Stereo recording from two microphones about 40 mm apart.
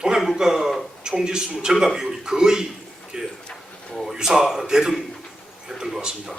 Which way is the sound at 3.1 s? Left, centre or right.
Centre.